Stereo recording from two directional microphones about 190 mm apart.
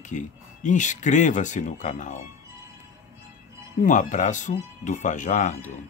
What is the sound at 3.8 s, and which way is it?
Speech, 40° left (ahead or behind).